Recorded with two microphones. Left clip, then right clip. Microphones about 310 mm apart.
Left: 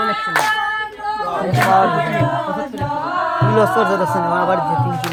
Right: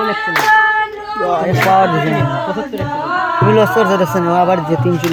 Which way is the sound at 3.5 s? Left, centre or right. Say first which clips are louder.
Right 2 dB; right.